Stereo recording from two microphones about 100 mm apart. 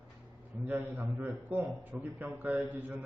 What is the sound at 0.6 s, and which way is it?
A man's voice, 15° right (ahead or behind).